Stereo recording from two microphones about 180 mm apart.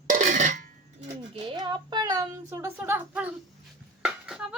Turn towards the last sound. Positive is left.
turn(degrees=-5)  # may be behind; listen again after turning